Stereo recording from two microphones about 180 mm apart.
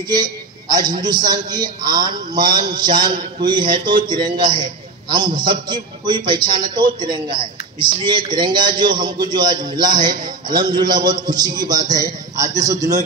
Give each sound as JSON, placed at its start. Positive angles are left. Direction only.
{"t": 0.1, "sound": "a man's voice", "side_deg": -20}